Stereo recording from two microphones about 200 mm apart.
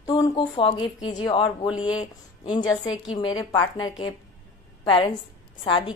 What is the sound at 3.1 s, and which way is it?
Speech, 20° left (ahead or behind).